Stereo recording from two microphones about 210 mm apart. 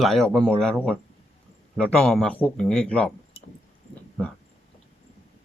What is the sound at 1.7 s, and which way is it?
Speech, 5° left (ahead or behind).